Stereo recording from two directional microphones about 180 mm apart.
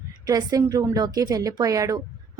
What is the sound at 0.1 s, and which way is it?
A woman's voice, 20° right (ahead or behind).